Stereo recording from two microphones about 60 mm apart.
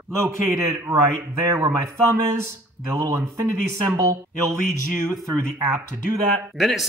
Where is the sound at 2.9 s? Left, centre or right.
Right.